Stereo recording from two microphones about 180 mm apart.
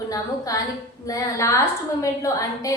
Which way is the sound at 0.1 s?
20° left (ahead or behind).